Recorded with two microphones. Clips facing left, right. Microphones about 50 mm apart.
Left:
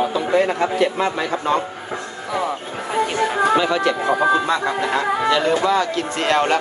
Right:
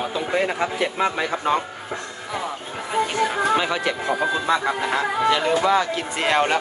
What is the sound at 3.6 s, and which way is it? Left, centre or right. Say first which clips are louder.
Speech: left 5 dB; centre.